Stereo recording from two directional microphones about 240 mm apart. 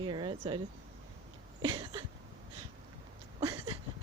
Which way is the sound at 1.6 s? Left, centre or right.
Centre.